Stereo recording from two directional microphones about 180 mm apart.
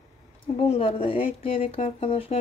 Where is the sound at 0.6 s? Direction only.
30° left (ahead or behind).